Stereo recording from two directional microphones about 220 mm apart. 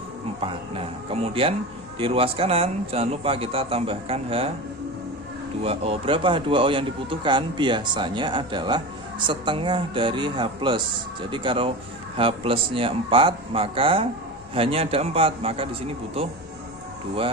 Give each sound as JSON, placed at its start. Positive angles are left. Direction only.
{"t": 0.4, "sound": "speech", "side_deg": -25}
{"t": 5.6, "sound": "speech", "side_deg": -25}